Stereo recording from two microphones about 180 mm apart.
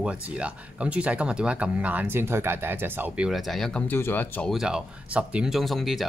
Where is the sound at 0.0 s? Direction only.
5° right (ahead or behind).